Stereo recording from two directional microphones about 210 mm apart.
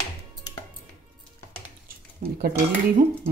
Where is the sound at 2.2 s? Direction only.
45° right (ahead or behind).